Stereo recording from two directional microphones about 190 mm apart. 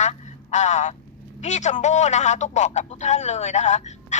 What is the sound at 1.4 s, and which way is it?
A man's voice, 40° left (ahead or behind).